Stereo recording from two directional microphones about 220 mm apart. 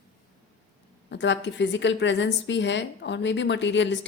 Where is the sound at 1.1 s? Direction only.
55° left (ahead or behind).